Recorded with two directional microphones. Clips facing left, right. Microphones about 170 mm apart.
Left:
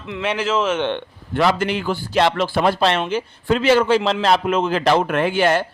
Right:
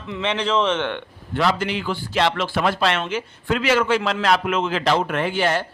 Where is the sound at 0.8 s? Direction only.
25° left (ahead or behind).